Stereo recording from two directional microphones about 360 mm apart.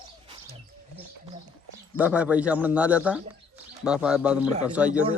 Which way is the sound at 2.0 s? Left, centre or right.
Centre.